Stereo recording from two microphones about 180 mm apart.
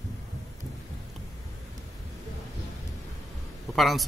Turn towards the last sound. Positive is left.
turn(degrees=0)  # may be behind; listen again after turning